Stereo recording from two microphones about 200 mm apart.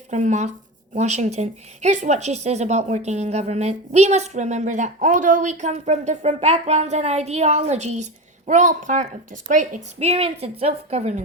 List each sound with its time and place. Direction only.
0.1 s speech: 35° right (ahead or behind)